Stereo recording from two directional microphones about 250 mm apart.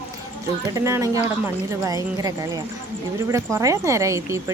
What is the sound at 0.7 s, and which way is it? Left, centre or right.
Speech, centre.